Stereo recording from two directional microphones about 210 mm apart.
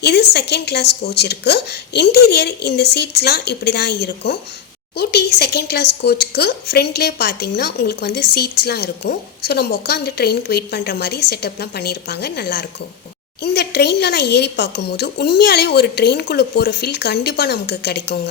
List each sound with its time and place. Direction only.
0.0 s speech: 50° left (ahead or behind)